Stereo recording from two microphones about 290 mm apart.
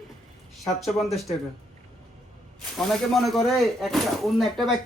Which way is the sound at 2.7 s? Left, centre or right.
Centre.